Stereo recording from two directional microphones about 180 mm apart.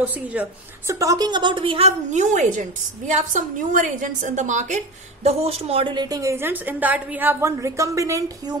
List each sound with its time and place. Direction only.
0.0 s a woman's voice: 10° right (ahead or behind)